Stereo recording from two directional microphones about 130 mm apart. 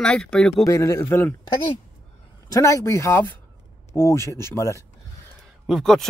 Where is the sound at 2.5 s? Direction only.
25° left (ahead or behind).